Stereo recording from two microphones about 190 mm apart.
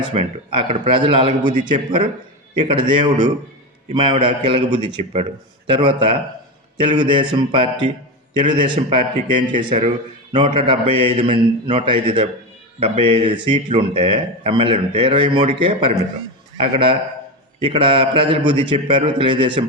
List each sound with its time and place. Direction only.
0.0 s speech: 30° right (ahead or behind)